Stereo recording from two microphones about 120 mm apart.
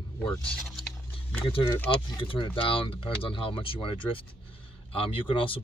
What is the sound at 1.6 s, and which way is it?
Speech, 25° left (ahead or behind).